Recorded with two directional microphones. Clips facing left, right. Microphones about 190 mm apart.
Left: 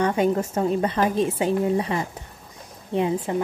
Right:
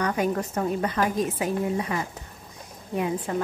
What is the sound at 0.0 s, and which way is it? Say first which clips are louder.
Speech: left 4 dB; 25° left (ahead or behind).